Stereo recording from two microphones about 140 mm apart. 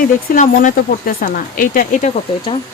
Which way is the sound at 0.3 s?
70° left (ahead or behind).